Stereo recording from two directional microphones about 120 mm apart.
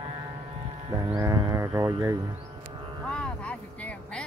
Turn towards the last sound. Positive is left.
turn(degrees=10)  # may be behind; listen again after turning